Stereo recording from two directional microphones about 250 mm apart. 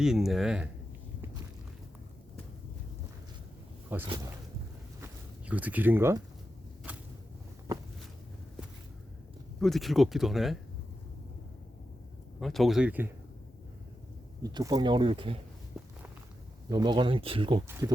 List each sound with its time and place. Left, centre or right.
0.0 s speech: centre
4.0 s speech: centre
4.9 s a sound: centre
9.6 s speech: centre
12.4 s speech: centre
14.4 s speech: centre
15.8 s walk: centre
16.6 s speech: centre